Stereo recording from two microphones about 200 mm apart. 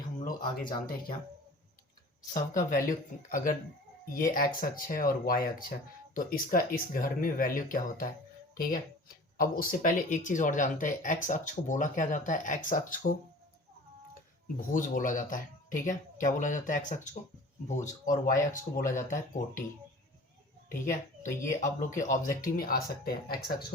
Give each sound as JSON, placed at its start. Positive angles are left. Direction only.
{"t": 0.5, "sound": "speech", "side_deg": 50}
{"t": 2.3, "sound": "speech", "side_deg": 40}
{"t": 14.7, "sound": "speech", "side_deg": 40}
{"t": 20.7, "sound": "a child's voice", "side_deg": 40}